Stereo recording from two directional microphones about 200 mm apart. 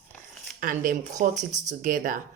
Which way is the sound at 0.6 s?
40° right (ahead or behind).